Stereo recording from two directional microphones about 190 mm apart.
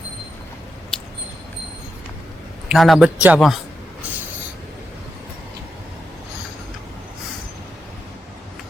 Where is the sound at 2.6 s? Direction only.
Centre (ahead or behind).